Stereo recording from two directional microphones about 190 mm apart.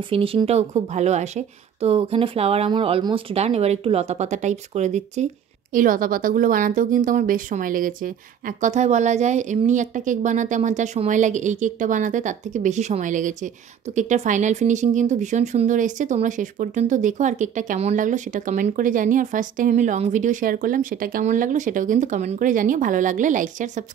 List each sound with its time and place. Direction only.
0.1 s speech: 30° right (ahead or behind)